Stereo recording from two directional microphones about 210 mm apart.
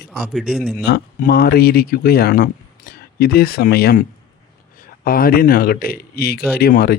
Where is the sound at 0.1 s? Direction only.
Centre (ahead or behind).